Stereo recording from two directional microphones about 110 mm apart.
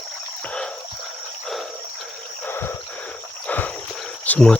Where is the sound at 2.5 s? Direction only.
20° left (ahead or behind).